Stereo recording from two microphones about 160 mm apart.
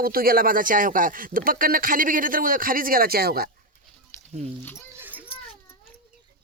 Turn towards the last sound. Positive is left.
turn(degrees=-10)  # may be behind; listen again after turning